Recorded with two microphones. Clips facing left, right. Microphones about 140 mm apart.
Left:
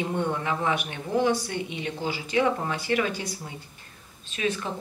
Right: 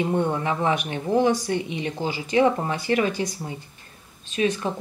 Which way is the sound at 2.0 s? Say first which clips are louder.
Right 5 dB; 20° right (ahead or behind).